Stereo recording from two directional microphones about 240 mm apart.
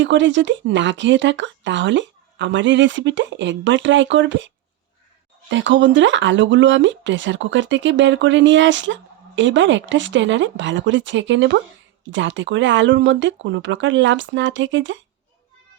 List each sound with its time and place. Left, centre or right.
0.0 s speech: right